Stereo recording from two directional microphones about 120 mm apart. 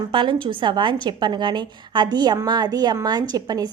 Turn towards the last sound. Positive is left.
turn(degrees=-35)  # may be behind; listen again after turning